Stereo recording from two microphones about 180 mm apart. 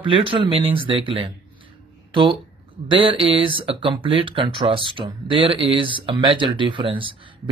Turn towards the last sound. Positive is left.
turn(degrees=-30)  # may be behind; listen again after turning